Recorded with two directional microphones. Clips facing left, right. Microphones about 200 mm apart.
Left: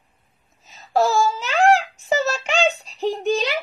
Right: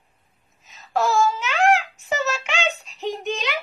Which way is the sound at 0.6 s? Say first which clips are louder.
Left 3 dB; 35° left (ahead or behind).